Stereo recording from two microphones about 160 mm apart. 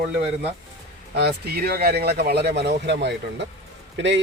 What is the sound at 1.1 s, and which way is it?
Speech, 80° right.